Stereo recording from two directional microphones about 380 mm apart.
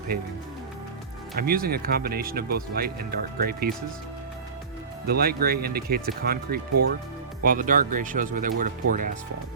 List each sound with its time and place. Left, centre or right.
0.1 s speech: right
1.4 s speech: right
5.0 s speech: right